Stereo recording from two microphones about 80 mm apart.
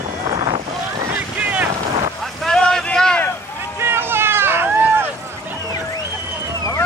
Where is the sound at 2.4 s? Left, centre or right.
Centre.